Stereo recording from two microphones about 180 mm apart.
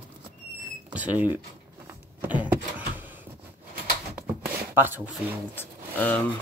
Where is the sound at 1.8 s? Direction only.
10° right (ahead or behind).